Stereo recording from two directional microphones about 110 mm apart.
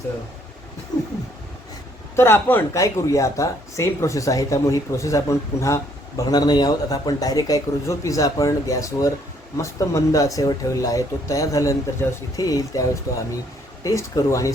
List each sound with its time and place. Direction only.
0.9 s speech: 40° left (ahead or behind)
2.1 s speech: 20° left (ahead or behind)
2.7 s speech: 30° left (ahead or behind)